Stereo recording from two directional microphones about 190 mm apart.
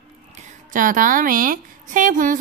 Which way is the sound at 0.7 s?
45° right (ahead or behind).